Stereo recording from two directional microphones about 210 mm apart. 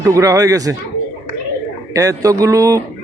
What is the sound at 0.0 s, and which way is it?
Speech, 15° right (ahead or behind).